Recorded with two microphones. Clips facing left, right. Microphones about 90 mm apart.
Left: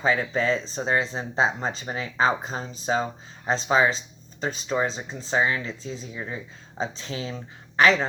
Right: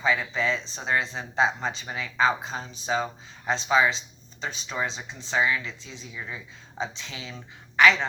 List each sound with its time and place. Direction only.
0.0 s speech: 40° left (ahead or behind)